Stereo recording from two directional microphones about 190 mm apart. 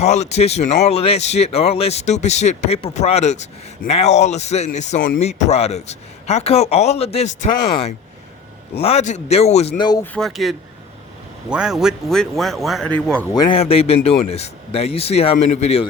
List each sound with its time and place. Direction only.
0.0 s speech: 35° left (ahead or behind)
10.0 s speech: centre (ahead or behind)
13.3 s speech: 20° left (ahead or behind)
13.6 s speech: 30° left (ahead or behind)